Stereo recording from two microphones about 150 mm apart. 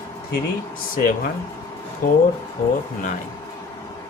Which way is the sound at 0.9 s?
65° left (ahead or behind).